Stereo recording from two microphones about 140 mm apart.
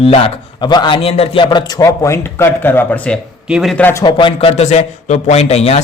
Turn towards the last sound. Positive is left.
turn(degrees=50)  # may be behind; listen again after turning